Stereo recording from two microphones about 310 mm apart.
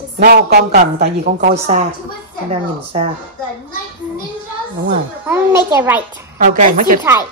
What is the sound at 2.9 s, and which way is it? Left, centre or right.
Speech, centre.